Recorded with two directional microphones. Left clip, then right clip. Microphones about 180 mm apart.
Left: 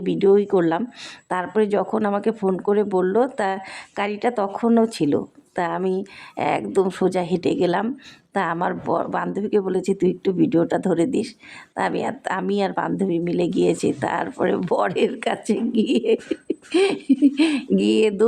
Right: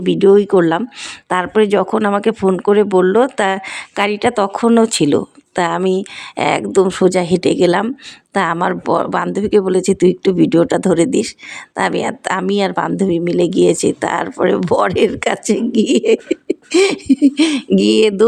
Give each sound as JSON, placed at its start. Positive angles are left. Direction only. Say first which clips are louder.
{"t": 0.0, "sound": "speech", "louder": "right 7 dB", "side_deg": -30}